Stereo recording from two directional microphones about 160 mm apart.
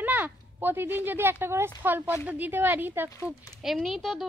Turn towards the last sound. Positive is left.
turn(degrees=0)  # may be behind; listen again after turning